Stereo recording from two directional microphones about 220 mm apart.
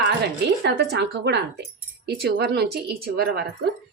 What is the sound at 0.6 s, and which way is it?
Speech, 50° right (ahead or behind).